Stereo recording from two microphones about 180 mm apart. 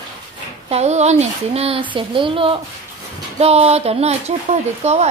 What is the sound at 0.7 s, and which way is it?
A child's voice, 40° right (ahead or behind).